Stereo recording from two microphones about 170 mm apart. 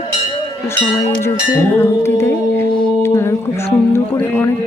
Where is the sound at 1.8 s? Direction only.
15° left (ahead or behind).